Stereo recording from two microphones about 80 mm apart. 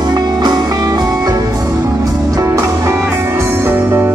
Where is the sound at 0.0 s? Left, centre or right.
Right.